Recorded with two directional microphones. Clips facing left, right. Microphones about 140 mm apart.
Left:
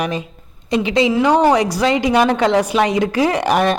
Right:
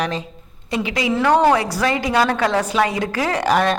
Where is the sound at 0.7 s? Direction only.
25° left (ahead or behind).